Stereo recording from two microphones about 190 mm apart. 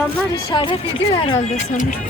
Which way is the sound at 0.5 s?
25° left (ahead or behind).